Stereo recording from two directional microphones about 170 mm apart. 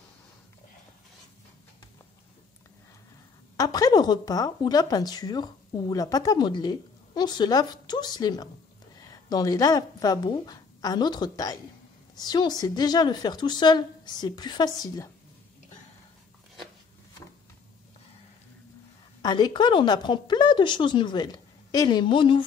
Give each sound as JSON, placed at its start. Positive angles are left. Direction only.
{"t": 3.5, "sound": "speech", "side_deg": 20}
{"t": 19.2, "sound": "speech", "side_deg": 25}